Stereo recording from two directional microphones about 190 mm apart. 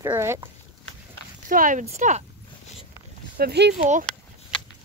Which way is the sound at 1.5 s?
45° right (ahead or behind).